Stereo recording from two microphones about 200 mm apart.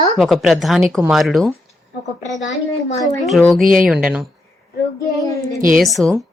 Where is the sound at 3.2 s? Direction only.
Centre (ahead or behind).